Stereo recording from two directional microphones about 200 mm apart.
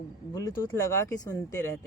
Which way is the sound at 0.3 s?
15° left (ahead or behind).